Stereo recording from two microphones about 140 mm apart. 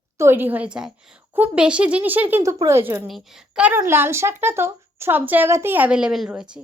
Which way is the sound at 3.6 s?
15° right (ahead or behind).